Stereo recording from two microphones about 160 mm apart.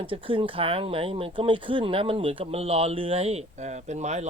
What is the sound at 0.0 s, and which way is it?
Speech, 35° right (ahead or behind).